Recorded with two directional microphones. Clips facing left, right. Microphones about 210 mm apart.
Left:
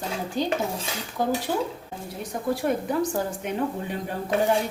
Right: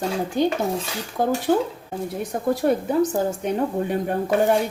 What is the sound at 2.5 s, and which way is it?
Speech, 40° right (ahead or behind).